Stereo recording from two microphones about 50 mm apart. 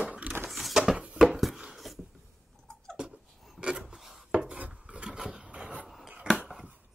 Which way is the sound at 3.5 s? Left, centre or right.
Centre.